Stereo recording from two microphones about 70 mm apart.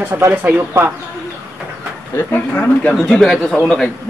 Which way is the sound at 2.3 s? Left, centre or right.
Left.